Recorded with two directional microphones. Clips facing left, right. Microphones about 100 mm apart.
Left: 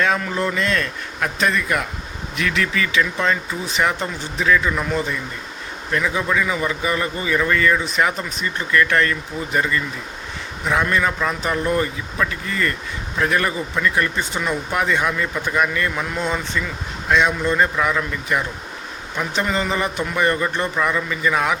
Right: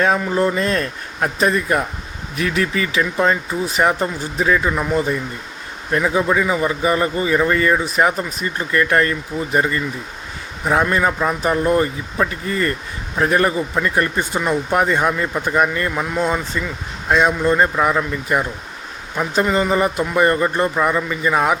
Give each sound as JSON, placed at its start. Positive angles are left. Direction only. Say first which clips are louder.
{"t": 0.0, "sound": "a man's voice", "louder": "right 4 dB", "side_deg": -30}
{"t": 4.7, "sound": "speech", "louder": "right 3 dB", "side_deg": -15}
{"t": 5.9, "sound": "a man's voice", "louder": "right 4 dB", "side_deg": -30}
{"t": 16.0, "sound": "a man's voice", "louder": "right 4 dB", "side_deg": -15}